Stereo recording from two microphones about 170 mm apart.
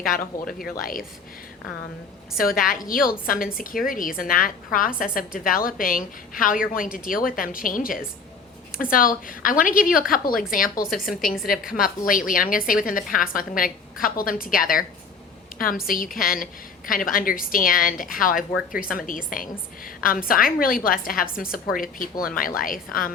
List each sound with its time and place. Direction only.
0.0 s a woman's voice: 60° left (ahead or behind)
2.4 s a woman's voice: 55° left (ahead or behind)
10.8 s a woman's voice: centre (ahead or behind)
11.8 s a woman's voice: 55° left (ahead or behind)